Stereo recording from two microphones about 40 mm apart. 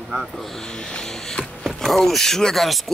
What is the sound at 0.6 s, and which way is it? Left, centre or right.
Music, centre.